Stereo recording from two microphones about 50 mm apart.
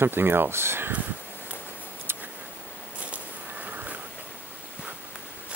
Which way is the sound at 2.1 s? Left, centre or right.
Right.